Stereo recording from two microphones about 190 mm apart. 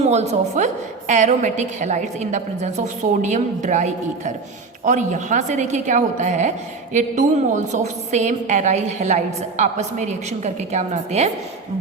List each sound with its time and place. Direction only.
0.0 s a woman's voice: 35° right (ahead or behind)